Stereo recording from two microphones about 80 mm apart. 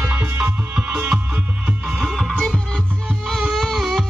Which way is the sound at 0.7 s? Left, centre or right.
Centre.